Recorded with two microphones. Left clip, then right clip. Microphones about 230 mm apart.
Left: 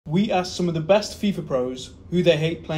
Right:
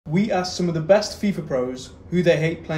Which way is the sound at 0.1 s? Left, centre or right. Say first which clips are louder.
Even; centre.